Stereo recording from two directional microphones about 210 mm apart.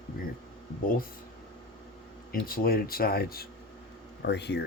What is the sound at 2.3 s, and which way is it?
Speech, 45° left (ahead or behind).